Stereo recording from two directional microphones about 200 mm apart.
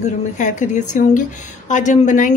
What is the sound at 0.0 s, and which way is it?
A woman's voice, 40° left (ahead or behind).